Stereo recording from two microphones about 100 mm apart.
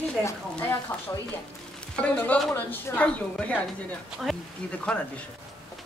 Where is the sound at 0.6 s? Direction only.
15° left (ahead or behind).